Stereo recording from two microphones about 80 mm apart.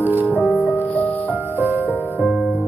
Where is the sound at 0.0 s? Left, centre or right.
Right.